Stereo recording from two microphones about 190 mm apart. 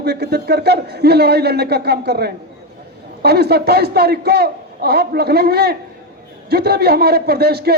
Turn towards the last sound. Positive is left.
turn(degrees=-55)  # may be behind; listen again after turning